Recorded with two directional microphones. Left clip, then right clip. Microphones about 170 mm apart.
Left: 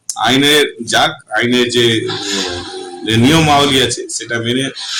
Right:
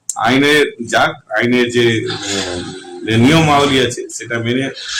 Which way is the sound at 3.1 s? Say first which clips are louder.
Left 1 dB; 5° right (ahead or behind).